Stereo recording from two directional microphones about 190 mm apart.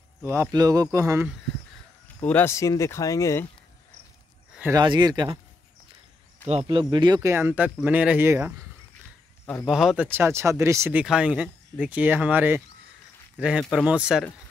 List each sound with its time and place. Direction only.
0.2 s speech: 15° right (ahead or behind)
2.2 s speech: 10° left (ahead or behind)
4.7 s speech: 20° right (ahead or behind)
6.7 s speech: 25° right (ahead or behind)
9.7 s speech: 5° right (ahead or behind)